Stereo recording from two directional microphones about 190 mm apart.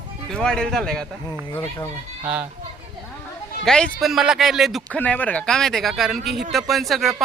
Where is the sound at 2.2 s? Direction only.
10° right (ahead or behind).